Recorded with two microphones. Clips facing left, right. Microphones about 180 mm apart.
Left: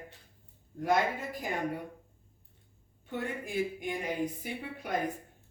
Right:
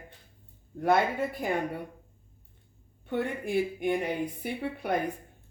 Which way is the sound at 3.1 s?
60° right (ahead or behind).